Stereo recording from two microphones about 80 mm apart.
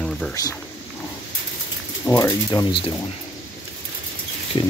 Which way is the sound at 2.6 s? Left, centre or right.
Left.